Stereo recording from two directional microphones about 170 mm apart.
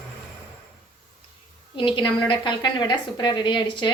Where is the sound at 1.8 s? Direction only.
30° left (ahead or behind).